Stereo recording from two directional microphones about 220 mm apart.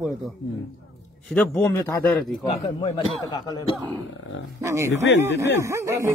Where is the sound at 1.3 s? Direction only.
10° left (ahead or behind).